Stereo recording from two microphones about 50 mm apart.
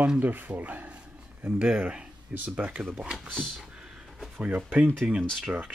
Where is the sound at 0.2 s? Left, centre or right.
Right.